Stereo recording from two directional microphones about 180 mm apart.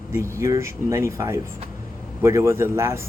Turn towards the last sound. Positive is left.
turn(degrees=-15)  # may be behind; listen again after turning